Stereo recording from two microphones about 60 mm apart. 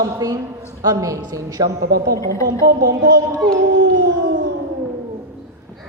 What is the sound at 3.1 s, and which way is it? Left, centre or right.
Speech, right.